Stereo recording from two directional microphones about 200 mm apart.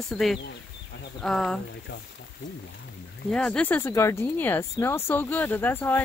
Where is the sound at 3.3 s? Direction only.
5° left (ahead or behind).